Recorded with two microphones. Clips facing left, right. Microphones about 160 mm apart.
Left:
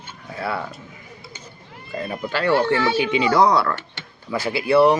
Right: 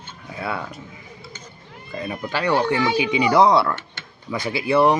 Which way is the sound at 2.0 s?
15° right (ahead or behind).